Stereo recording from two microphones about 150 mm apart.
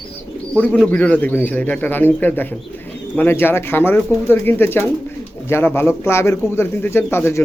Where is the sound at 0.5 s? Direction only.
10° left (ahead or behind).